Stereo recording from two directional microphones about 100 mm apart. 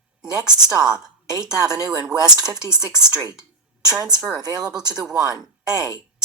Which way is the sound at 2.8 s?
5° right (ahead or behind).